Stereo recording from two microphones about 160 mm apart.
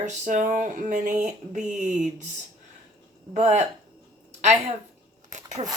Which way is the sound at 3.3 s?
45° right (ahead or behind).